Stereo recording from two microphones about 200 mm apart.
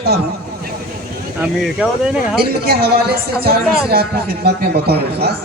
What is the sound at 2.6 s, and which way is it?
A man's voice, 55° right (ahead or behind).